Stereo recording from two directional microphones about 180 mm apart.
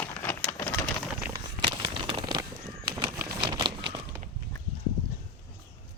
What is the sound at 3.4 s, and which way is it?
Crumpling, 25° right (ahead or behind).